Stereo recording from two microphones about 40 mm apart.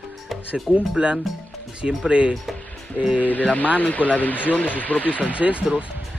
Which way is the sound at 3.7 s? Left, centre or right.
Left.